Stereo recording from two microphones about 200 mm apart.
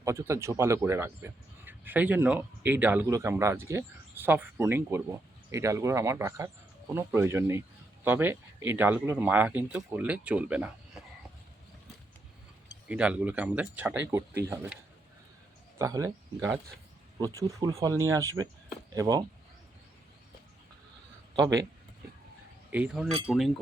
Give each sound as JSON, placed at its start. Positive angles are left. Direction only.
{"t": 0.0, "sound": "speech", "side_deg": -15}
{"t": 12.9, "sound": "speech", "side_deg": -5}
{"t": 15.8, "sound": "speech", "side_deg": -15}
{"t": 21.3, "sound": "speech", "side_deg": -20}
{"t": 22.7, "sound": "chink", "side_deg": -5}